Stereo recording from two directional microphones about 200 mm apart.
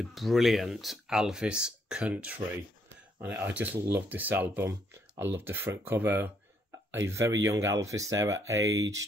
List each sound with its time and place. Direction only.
0.0 s speech: centre (ahead or behind); by 8.9 s 15° right (ahead or behind)